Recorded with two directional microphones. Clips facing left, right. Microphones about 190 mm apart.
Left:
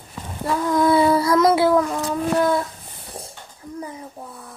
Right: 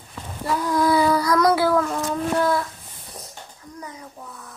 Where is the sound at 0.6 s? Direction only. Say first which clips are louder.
Left 3 dB; 25° left (ahead or behind).